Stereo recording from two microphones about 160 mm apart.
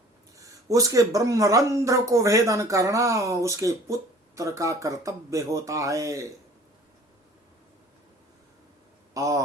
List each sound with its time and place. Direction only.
0.3 s speech: 20° right (ahead or behind)
9.1 s speech: 20° right (ahead or behind)